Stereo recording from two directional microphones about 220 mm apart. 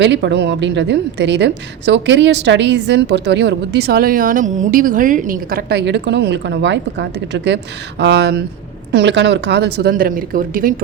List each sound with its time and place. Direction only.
0.0 s a woman's voice: 55° right (ahead or behind)